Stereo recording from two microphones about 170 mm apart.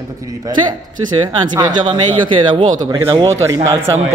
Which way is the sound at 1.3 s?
25° right (ahead or behind).